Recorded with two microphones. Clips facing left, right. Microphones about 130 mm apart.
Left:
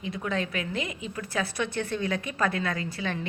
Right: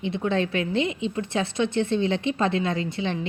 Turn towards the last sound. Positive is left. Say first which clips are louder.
# right 5 dB
turn(degrees=-25)  # may be behind; listen again after turning